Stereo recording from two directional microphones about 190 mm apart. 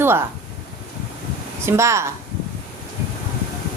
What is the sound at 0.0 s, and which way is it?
Speech, 10° right (ahead or behind).